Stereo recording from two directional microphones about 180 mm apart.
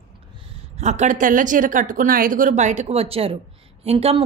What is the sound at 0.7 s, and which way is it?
A woman's voice, 40° right (ahead or behind).